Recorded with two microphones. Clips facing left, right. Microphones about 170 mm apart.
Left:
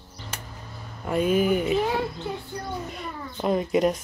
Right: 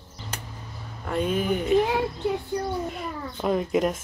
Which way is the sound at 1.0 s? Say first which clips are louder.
Left 4 dB; 10° left (ahead or behind).